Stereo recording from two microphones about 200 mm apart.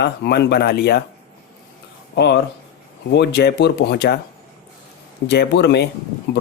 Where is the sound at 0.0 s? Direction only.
55° left (ahead or behind).